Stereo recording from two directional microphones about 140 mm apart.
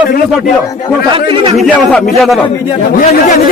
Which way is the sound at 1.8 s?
5° left (ahead or behind).